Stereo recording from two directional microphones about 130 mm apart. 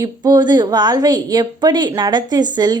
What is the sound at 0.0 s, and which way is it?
A woman's voice, 30° right (ahead or behind).